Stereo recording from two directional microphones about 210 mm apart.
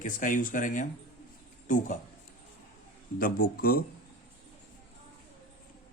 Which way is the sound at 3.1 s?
45° left (ahead or behind).